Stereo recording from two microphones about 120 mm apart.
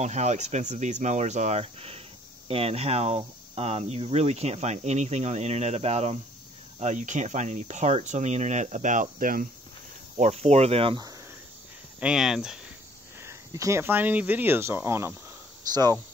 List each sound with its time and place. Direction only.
0.0 s speech: 70° right (ahead or behind)
6.8 s speech: 85° right
10.1 s speech: 65° right (ahead or behind)
12.0 s speech: 5° right (ahead or behind)
13.2 s speech: 25° right (ahead or behind)
15.7 s speech: 35° right (ahead or behind)